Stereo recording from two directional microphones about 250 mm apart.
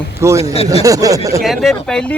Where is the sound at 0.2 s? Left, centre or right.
Centre.